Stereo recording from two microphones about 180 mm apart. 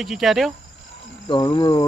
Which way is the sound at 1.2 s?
25° left (ahead or behind).